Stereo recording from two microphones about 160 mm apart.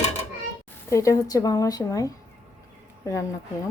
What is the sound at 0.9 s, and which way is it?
Speech, 20° left (ahead or behind).